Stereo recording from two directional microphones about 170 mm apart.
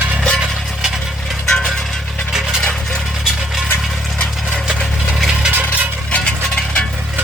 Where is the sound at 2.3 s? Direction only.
5° left (ahead or behind).